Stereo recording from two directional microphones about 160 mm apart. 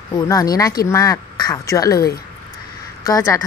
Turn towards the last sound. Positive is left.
turn(degrees=20)  # may be behind; listen again after turning